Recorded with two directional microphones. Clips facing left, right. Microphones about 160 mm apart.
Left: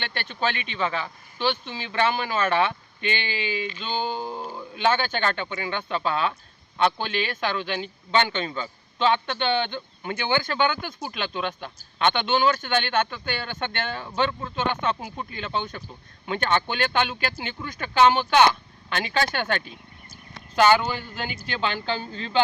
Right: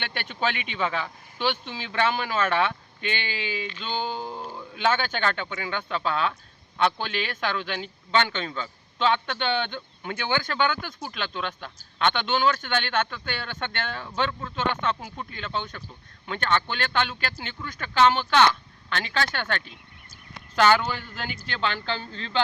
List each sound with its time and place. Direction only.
0.0 s speech: 10° right (ahead or behind)
1.9 s a man's voice: 5° left (ahead or behind)